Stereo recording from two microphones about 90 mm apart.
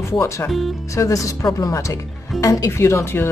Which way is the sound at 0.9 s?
40° left (ahead or behind).